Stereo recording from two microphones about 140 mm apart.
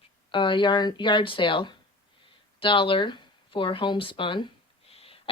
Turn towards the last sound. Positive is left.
turn(degrees=45)  # may be behind; listen again after turning